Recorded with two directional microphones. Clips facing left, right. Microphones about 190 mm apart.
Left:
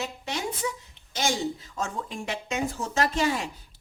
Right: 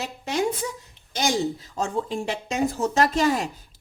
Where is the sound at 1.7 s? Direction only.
35° right (ahead or behind).